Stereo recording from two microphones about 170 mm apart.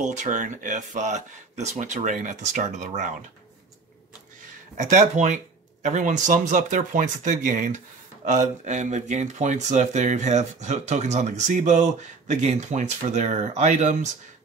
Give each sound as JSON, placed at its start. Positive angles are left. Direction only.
{"t": 0.0, "sound": "speech", "side_deg": -45}
{"t": 4.7, "sound": "speech", "side_deg": -45}